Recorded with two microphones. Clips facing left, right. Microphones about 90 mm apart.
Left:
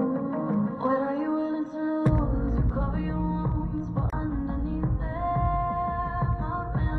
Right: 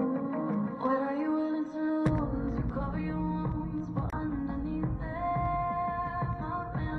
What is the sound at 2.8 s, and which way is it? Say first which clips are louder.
Music: left 4 dB; 35° left (ahead or behind).